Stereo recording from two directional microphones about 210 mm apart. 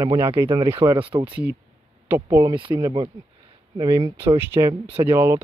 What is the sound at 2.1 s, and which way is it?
Speech, 10° right (ahead or behind).